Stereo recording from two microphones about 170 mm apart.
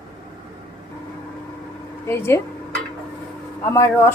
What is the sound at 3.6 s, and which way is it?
Speech, 15° left (ahead or behind).